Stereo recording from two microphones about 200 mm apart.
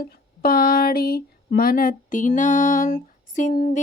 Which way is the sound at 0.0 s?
50° left (ahead or behind).